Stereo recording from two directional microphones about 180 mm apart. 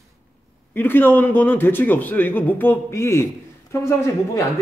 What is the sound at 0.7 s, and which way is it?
A man's voice, 10° left (ahead or behind).